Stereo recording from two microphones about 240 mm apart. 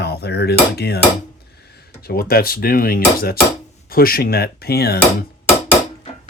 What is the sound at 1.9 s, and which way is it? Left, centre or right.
Speech, left.